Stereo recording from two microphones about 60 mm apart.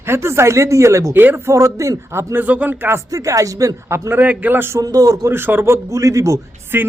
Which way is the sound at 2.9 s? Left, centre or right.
Right.